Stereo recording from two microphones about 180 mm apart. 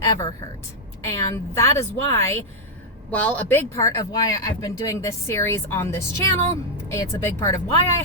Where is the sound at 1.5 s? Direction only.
15° left (ahead or behind).